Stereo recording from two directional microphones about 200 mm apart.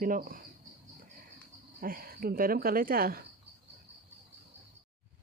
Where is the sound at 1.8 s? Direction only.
45° right (ahead or behind).